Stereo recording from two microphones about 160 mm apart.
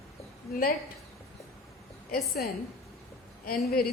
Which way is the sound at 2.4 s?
70° left (ahead or behind).